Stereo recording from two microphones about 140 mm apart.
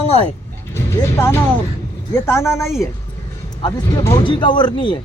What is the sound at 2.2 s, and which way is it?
Speech, 20° left (ahead or behind).